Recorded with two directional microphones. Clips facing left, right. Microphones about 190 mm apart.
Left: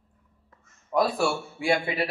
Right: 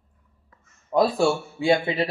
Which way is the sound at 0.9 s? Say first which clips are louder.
Right 4 dB; 25° right (ahead or behind).